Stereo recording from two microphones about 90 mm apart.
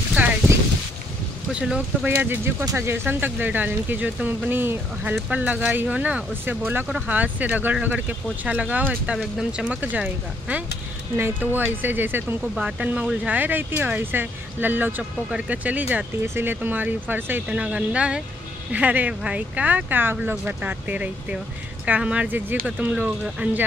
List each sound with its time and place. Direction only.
1.5 s speech: 10° right (ahead or behind)
2.0 s speech: 25° right (ahead or behind)
9.2 s speech: 5° right (ahead or behind)
11.1 s speech: 25° right (ahead or behind)